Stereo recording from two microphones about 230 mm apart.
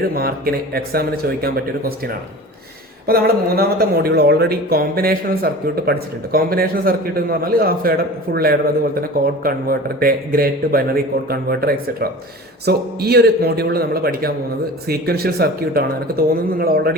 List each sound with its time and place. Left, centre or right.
0.1 s speech: right
3.1 s a man's voice: right